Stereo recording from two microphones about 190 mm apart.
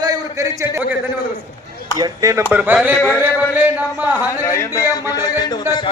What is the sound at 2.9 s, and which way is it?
Speech, 10° left (ahead or behind).